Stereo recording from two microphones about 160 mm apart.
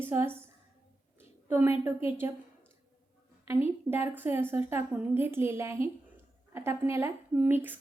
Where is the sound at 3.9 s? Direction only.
15° right (ahead or behind).